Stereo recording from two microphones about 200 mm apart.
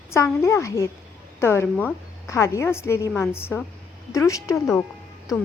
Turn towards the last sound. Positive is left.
turn(degrees=15)  # may be behind; listen again after turning